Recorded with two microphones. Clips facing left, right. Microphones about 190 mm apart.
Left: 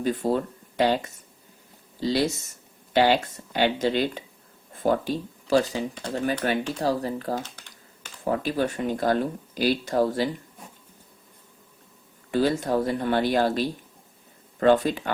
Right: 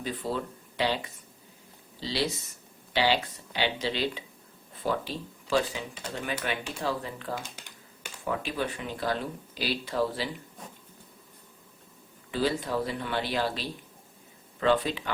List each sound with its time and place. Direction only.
0.0 s speech: 45° left (ahead or behind)
12.3 s speech: 45° left (ahead or behind)